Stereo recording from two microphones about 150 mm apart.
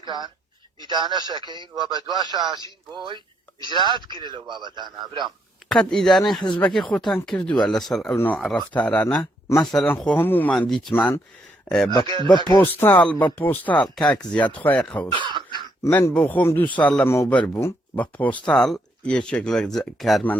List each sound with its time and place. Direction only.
0.0 s a man's voice: 30° right (ahead or behind)
5.9 s speech: 5° left (ahead or behind)
8.1 s a man's voice: 10° left (ahead or behind)
11.7 s speech: 5° left (ahead or behind)
12.0 s a man's voice: 30° right (ahead or behind)
12.5 s a man's voice: 15° left (ahead or behind)
15.1 s throat clearing: 30° right (ahead or behind)
15.8 s a man's voice: 15° left (ahead or behind); by 20.2 s centre (ahead or behind)